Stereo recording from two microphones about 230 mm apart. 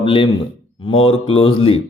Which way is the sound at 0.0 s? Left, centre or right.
Left.